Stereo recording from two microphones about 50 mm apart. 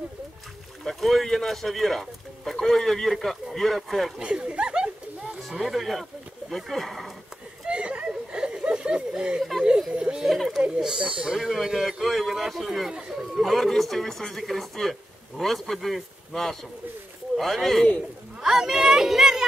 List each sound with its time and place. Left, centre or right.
0.8 s speech: centre
4.2 s a sound: centre
6.5 s speech: centre
7.6 s a sound: right
9.6 s a man's voice: centre
11.3 s speech: centre
18.4 s speech: centre